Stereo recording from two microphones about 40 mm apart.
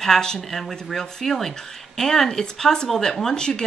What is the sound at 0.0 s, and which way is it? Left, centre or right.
A woman's voice, centre.